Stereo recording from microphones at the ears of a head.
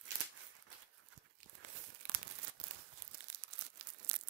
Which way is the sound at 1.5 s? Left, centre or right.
Right.